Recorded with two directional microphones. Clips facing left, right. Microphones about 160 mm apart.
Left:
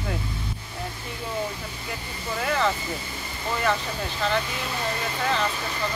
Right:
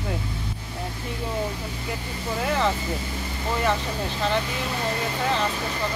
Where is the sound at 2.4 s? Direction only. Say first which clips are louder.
Right 1 dB; 20° right (ahead or behind).